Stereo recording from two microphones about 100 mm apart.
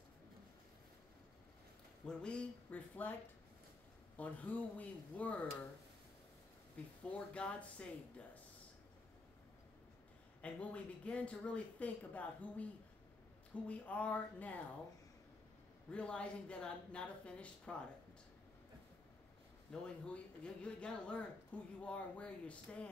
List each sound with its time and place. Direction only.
2.0 s speech: 10° left (ahead or behind)
4.2 s speech: 15° left (ahead or behind)
7.1 s speech: 10° left (ahead or behind)
10.4 s speech: 15° left (ahead or behind)
13.7 s speech: 15° left (ahead or behind)
15.9 s speech: 10° left (ahead or behind)
19.7 s speech: 10° left (ahead or behind)